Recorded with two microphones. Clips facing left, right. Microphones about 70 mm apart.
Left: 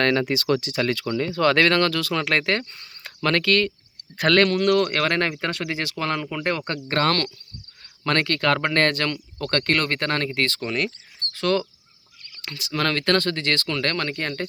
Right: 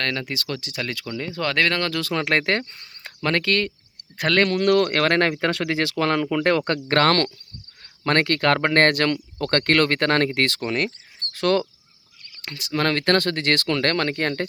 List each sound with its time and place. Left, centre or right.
0.0 s speech: centre
2.0 s speech: right
2.6 s speech: centre
3.2 s speech: right
4.2 s speech: centre
4.4 s speech: right
5.5 s speech: right
8.0 s speech: right
9.7 s speech: right
10.7 s speech: right
11.3 s speech: right
13.1 s speech: right